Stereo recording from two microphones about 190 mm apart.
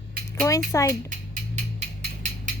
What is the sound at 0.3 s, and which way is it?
Speech, 15° left (ahead or behind).